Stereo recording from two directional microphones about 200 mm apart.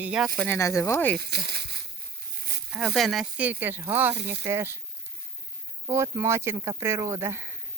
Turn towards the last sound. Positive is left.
turn(degrees=-15)  # may be behind; listen again after turning